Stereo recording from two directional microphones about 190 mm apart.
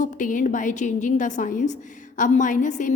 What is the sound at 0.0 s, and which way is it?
A woman's voice, 45° left (ahead or behind).